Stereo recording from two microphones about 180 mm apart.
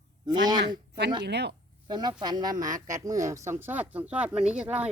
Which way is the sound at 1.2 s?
70° right (ahead or behind).